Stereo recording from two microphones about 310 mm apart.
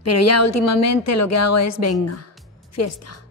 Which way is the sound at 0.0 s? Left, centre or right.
Left.